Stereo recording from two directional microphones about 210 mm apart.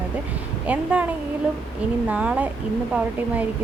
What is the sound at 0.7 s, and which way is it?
A woman's voice, 5° right (ahead or behind).